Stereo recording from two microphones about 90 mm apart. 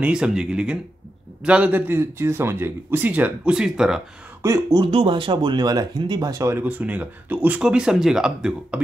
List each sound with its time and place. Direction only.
0.0 s speech: 10° right (ahead or behind)
4.4 s speech: 35° right (ahead or behind)
4.9 s speech: 75° right (ahead or behind); by 6.4 s 50° right (ahead or behind)
6.4 s speech: 20° right (ahead or behind); by 8.8 s 5° right (ahead or behind)